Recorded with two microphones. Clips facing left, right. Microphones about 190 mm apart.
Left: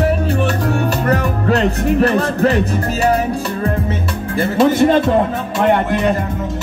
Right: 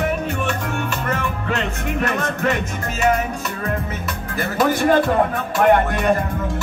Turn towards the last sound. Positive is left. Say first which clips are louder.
# left 4 dB
turn(degrees=25)  # may be behind; listen again after turning